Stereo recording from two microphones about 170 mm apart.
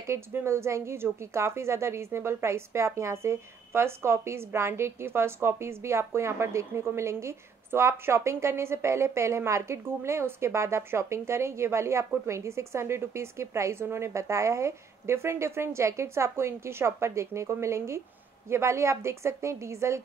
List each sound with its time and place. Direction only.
0.0 s a woman's voice: 15° right (ahead or behind)